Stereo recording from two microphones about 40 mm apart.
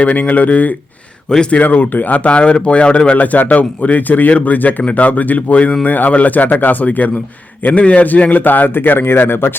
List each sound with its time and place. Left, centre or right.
0.0 s a man's voice: left
3.2 s a man's voice: left